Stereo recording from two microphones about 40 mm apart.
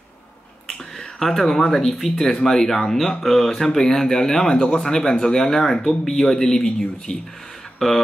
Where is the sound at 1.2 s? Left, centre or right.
Centre.